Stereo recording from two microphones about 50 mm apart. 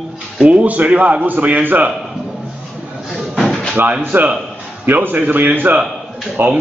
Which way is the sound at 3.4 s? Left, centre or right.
Centre.